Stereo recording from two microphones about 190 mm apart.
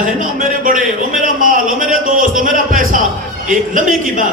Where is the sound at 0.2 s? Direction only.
45° right (ahead or behind).